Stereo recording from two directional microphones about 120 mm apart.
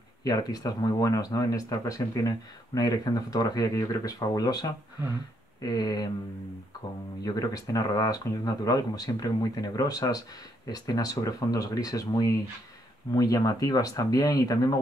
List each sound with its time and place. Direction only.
0.2 s speech: 35° left (ahead or behind)
7.2 s speech: 30° left (ahead or behind)